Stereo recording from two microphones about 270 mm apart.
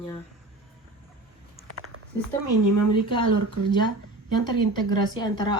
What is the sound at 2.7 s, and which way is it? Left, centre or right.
Speech, right.